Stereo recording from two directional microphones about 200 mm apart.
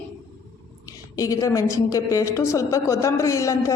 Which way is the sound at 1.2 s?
15° left (ahead or behind).